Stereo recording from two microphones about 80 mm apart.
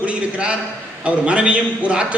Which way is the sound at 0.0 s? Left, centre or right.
Centre.